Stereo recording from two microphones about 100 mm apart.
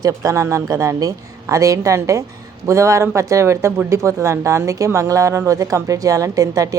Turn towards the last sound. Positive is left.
turn(degrees=-35)  # may be behind; listen again after turning